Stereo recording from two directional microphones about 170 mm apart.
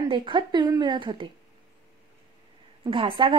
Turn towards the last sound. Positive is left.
turn(degrees=-30)  # may be behind; listen again after turning